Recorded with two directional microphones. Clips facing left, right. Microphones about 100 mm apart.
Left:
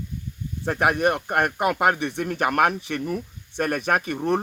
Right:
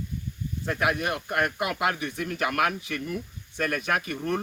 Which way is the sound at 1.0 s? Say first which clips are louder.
Left 6 dB; 40° left (ahead or behind).